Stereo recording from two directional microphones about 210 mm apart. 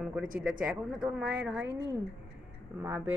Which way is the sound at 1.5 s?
60° right (ahead or behind).